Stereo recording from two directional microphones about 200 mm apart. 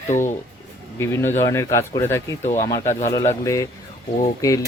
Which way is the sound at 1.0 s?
10° left (ahead or behind).